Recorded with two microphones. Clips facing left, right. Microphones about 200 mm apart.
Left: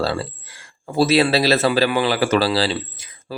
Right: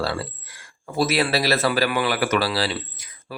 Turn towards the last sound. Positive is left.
turn(degrees=25)  # may be behind; listen again after turning